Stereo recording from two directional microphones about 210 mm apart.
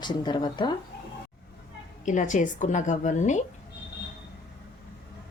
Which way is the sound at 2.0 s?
35° left (ahead or behind).